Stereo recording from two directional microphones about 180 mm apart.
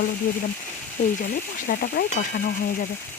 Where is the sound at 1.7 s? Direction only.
50° left (ahead or behind).